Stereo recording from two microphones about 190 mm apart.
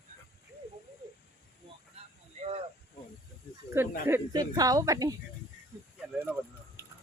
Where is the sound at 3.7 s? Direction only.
10° right (ahead or behind).